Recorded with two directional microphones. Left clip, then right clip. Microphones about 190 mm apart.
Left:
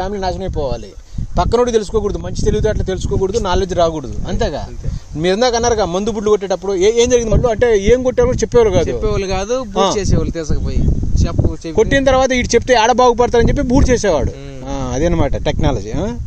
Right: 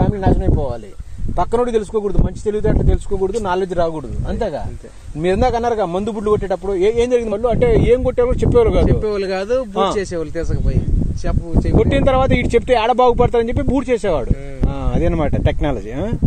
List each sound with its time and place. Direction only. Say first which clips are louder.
0.0 s a man's voice: right 1 dB; 25° left (ahead or behind)
8.8 s speech: even; 50° left (ahead or behind)
12.0 s a man's voice: left 3 dB; 25° left (ahead or behind)